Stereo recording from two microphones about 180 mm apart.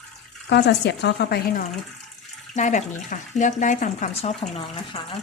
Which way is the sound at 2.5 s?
45° left (ahead or behind).